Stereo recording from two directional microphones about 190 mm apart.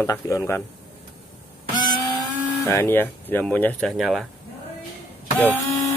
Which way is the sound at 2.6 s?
10° left (ahead or behind).